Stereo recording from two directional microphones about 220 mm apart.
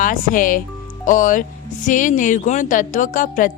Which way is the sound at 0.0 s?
40° left (ahead or behind).